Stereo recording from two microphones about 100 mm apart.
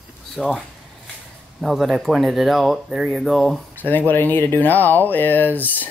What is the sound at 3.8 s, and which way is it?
Speech, 20° left (ahead or behind).